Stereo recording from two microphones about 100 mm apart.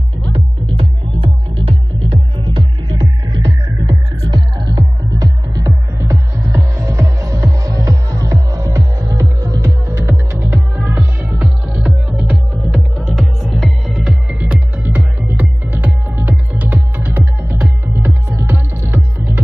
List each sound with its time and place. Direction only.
0.3 s music: 60° right (ahead or behind)
4.2 s music: 45° right (ahead or behind); by 11.3 s 15° right (ahead or behind)
11.3 s music: 5° right (ahead or behind)
14.8 s music: 15° right (ahead or behind)